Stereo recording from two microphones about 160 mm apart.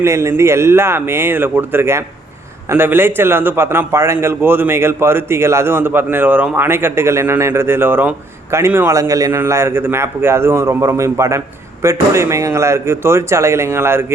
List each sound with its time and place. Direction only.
0.0 s a man's voice: 15° right (ahead or behind)